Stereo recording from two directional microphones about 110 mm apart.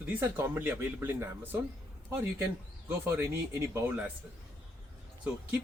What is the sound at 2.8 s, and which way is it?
Speech, 20° right (ahead or behind).